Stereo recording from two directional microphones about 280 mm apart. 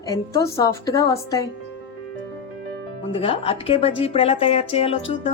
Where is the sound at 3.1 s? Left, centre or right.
Centre.